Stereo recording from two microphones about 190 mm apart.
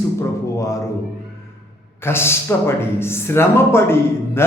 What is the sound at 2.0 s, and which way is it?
A man's voice, 15° left (ahead or behind).